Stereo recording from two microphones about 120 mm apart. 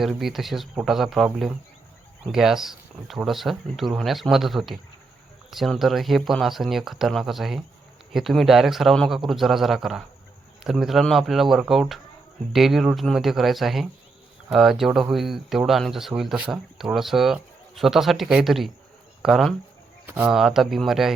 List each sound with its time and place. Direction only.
0.0 s speech: centre (ahead or behind)
20.1 s speech: 15° right (ahead or behind)
20.3 s speech: 5° right (ahead or behind)